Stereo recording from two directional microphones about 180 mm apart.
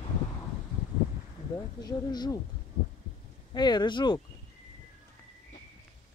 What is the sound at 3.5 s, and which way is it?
Speech, 25° left (ahead or behind).